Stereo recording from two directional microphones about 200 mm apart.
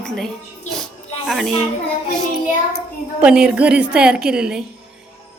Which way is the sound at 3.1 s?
5° right (ahead or behind).